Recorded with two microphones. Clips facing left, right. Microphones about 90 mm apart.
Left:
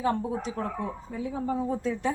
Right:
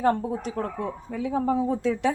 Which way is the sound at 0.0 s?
50° right (ahead or behind).